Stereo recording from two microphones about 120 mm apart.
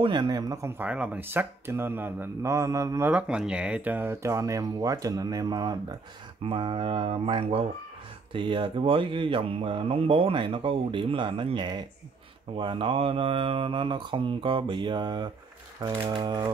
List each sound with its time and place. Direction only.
0.0 s speech: 40° right (ahead or behind)
3.1 s speech: 10° right (ahead or behind); by 5.9 s 35° right (ahead or behind)
6.4 s speech: 45° right (ahead or behind)